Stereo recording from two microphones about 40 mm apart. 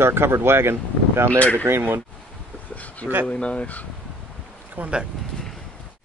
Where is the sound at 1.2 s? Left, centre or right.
Left.